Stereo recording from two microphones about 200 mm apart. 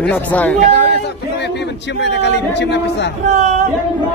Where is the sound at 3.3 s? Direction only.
35° right (ahead or behind).